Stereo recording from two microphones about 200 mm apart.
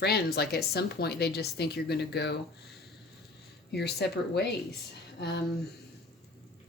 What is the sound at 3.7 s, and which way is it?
Speech, 55° left (ahead or behind).